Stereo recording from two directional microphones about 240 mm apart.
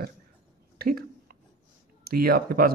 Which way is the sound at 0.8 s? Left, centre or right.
Right.